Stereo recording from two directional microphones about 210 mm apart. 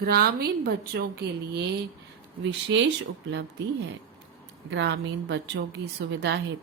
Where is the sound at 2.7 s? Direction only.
60° right (ahead or behind).